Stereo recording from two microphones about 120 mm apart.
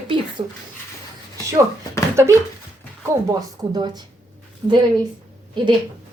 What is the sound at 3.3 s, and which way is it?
Speech, 35° right (ahead or behind).